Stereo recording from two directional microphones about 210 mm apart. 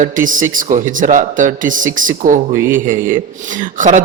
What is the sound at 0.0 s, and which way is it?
A man's voice, 40° right (ahead or behind).